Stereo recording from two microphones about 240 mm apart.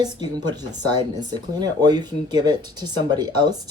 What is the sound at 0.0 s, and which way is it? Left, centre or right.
Speech, centre.